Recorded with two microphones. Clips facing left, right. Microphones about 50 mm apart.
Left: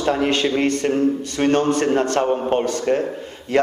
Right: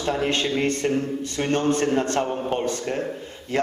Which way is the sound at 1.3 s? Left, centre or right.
Left.